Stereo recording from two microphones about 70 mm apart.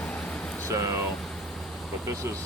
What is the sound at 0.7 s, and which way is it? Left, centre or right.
Speech, right.